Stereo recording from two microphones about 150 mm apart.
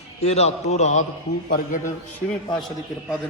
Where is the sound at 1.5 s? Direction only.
60° left (ahead or behind).